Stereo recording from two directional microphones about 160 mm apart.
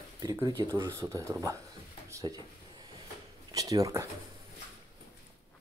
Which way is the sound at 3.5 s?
20° right (ahead or behind).